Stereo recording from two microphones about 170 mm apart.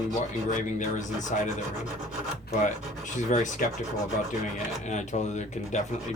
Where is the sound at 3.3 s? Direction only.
50° left (ahead or behind).